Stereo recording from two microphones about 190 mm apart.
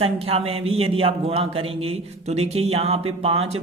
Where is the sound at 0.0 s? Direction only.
30° right (ahead or behind).